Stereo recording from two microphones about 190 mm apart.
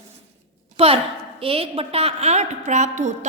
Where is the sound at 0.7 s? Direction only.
30° right (ahead or behind).